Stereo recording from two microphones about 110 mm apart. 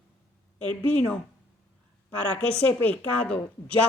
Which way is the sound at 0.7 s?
15° left (ahead or behind).